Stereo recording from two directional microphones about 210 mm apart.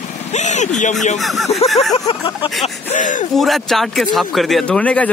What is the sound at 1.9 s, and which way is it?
Speech, 25° left (ahead or behind).